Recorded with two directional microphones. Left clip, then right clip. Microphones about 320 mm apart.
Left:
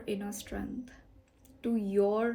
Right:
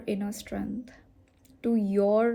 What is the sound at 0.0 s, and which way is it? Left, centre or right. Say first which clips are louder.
Speech: right 4 dB; right.